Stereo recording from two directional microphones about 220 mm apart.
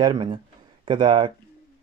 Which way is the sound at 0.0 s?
20° right (ahead or behind).